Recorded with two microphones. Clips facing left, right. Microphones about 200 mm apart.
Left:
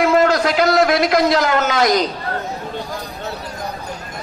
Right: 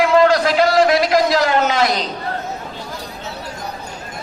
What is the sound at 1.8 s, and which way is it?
Speech, 40° left (ahead or behind).